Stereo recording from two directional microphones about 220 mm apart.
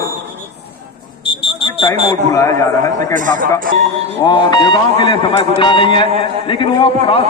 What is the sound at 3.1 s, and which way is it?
Speech, 40° right (ahead or behind).